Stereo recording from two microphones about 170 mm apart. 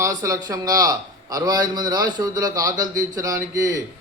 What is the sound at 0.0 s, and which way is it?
A man's voice, 20° right (ahead or behind).